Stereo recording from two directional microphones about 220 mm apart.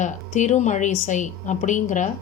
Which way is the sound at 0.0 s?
35° left (ahead or behind).